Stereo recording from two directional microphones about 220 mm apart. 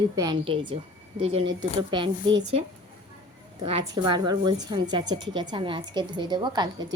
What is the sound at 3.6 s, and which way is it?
A woman's voice, 25° right (ahead or behind).